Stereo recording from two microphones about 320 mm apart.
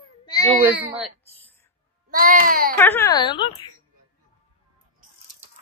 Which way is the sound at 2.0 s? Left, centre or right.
Right.